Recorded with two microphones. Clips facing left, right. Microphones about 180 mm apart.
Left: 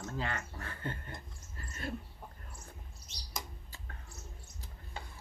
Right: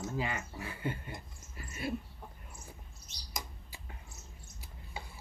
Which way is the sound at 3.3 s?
15° right (ahead or behind).